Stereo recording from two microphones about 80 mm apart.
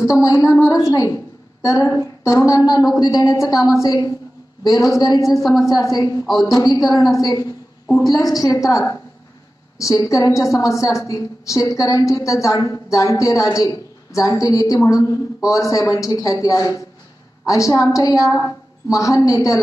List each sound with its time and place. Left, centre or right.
0.0 s a woman's voice: left
5.2 s a woman's voice: centre
5.8 s a woman's voice: left